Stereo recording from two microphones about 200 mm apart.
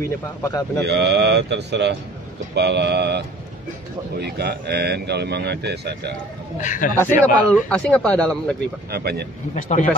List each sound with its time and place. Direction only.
0.4 s speech: 15° left (ahead or behind)
0.8 s speech: 55° right (ahead or behind)
6.6 s speech: 40° left (ahead or behind)
7.0 s a man's voice: 10° left (ahead or behind)
8.9 s speech: 55° right (ahead or behind)
9.6 s speech: 40° left (ahead or behind)